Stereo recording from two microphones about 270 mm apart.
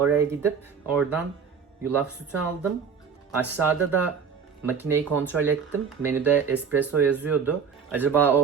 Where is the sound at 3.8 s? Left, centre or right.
Right.